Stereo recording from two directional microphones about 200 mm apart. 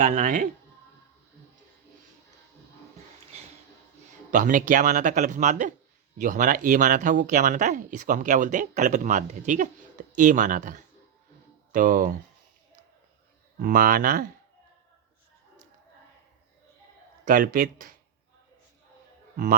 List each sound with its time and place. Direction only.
0.0 s speech: 40° right (ahead or behind)
4.3 s speech: 40° right (ahead or behind)
13.6 s speech: 45° right (ahead or behind)
17.2 s speech: 45° right (ahead or behind)